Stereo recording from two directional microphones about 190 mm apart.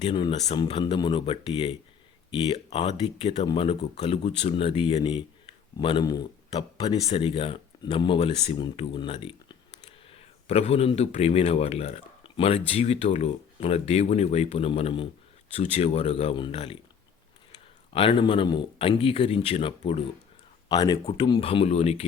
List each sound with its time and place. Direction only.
0.0 s a man's voice: 25° left (ahead or behind)
17.9 s speech: 30° left (ahead or behind)
20.7 s speech: 20° left (ahead or behind)